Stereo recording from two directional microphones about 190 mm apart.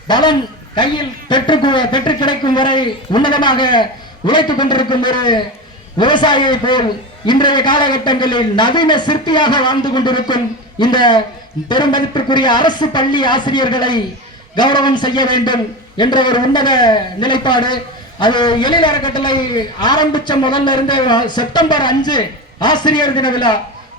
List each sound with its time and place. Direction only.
0.1 s a man's voice: 25° left (ahead or behind)